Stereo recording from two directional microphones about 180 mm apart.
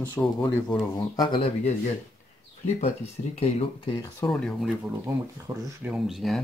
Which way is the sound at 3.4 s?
30° left (ahead or behind).